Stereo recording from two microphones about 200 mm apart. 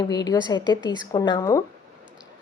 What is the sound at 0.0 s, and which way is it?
A woman's voice, 20° left (ahead or behind).